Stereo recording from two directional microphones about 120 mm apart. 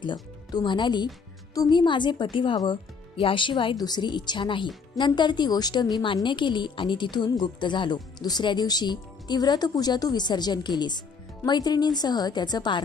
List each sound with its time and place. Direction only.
0.0 s a woman's voice: 40° left (ahead or behind)